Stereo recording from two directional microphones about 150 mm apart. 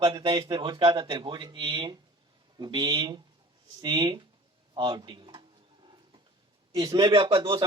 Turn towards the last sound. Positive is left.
turn(degrees=-30)  # may be behind; listen again after turning